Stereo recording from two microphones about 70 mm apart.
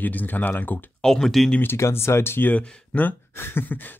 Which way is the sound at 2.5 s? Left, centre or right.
Left.